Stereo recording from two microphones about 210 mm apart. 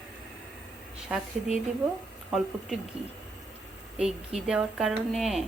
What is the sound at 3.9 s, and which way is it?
Speech, 5° right (ahead or behind).